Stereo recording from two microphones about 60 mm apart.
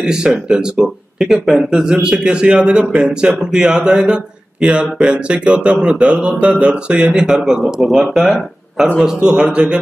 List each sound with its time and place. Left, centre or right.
0.0 s a man's voice: centre